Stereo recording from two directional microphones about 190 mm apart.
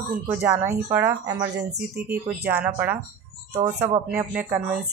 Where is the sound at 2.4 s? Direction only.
10° right (ahead or behind).